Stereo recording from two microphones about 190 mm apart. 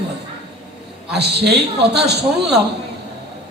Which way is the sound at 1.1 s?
60° right (ahead or behind).